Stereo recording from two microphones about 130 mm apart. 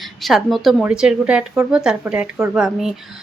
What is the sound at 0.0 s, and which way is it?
A woman's voice, centre (ahead or behind).